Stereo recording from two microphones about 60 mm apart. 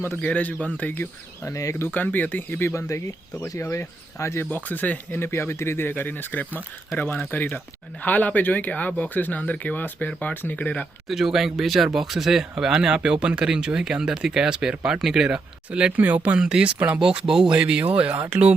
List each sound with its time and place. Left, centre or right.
0.2 s speech: left
1.5 s speech: left
1.9 s speech: left
2.6 s speech: left
4.4 s speech: left
5.3 s speech: left
10.3 s speech: left
10.6 s speech: left
11.1 s speech: centre
15.7 s speech: right
16.4 s speech: centre
17.0 s speech: centre